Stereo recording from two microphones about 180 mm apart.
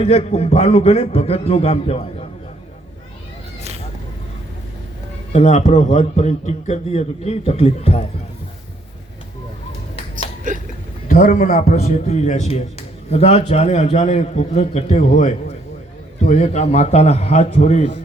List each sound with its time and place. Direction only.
0.0 s a man's voice: 35° left (ahead or behind)
5.3 s a man's voice: 40° left (ahead or behind)
10.5 s a sound: 45° right (ahead or behind)
11.1 s a man's voice: 45° left (ahead or behind)